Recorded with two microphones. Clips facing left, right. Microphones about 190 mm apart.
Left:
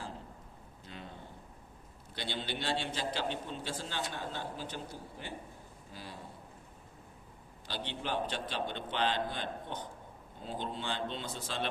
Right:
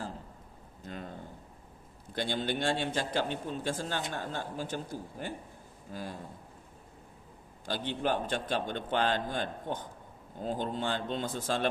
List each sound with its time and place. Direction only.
0.9 s a sound: 45° right (ahead or behind)
2.1 s a man's voice: 45° right (ahead or behind)
7.7 s a man's voice: 50° right (ahead or behind)